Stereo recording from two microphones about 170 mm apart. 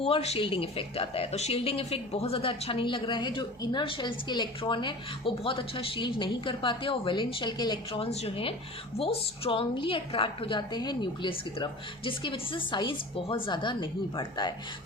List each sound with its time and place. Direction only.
0.0 s a woman's voice: 35° left (ahead or behind)